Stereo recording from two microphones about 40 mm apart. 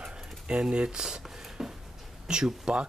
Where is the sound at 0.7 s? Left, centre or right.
Right.